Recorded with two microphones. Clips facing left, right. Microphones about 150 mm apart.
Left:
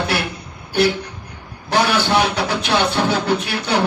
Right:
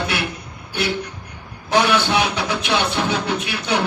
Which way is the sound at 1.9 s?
35° left (ahead or behind).